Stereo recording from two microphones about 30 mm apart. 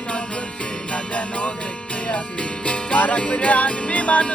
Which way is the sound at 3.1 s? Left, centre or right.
Left.